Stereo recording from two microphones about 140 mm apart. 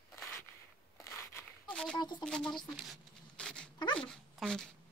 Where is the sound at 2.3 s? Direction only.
5° left (ahead or behind).